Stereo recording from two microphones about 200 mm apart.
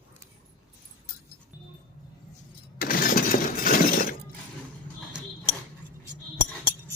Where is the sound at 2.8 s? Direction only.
45° left (ahead or behind).